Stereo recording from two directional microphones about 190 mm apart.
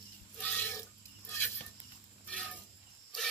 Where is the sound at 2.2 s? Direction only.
5° left (ahead or behind).